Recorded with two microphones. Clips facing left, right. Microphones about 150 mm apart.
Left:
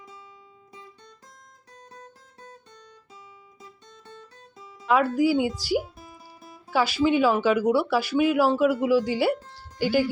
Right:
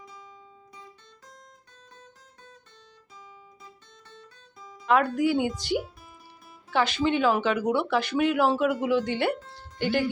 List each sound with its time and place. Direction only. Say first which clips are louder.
1.7 s guitar: left 9 dB; 45° left (ahead or behind)
4.9 s speech: left 2 dB; 5° left (ahead or behind)